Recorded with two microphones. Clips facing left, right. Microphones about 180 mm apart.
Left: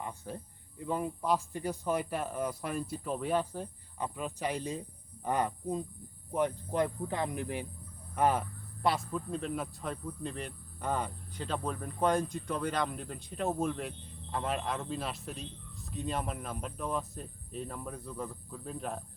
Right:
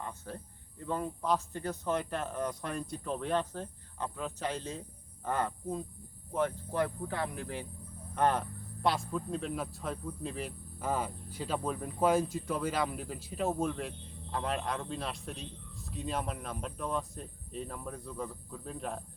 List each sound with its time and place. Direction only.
0.0 s speech: 15° left (ahead or behind)